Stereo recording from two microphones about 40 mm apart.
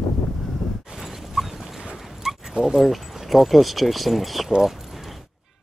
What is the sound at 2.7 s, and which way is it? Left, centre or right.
Speech, centre.